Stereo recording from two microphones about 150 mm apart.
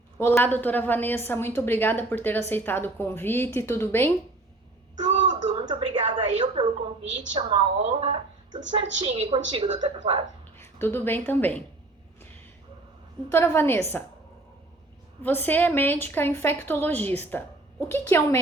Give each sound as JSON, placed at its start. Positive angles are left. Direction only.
{"t": 0.2, "sound": "a woman's voice", "side_deg": 15}
{"t": 4.9, "sound": "a sound", "side_deg": -50}
{"t": 5.5, "sound": "a sound", "side_deg": -35}
{"t": 7.3, "sound": "a woman's voice", "side_deg": -40}
{"t": 10.6, "sound": "a woman's voice", "side_deg": 15}
{"t": 13.3, "sound": "a woman's voice", "side_deg": 15}
{"t": 15.2, "sound": "a woman's voice", "side_deg": 10}